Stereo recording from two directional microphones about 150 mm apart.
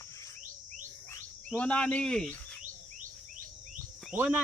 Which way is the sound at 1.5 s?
10° left (ahead or behind).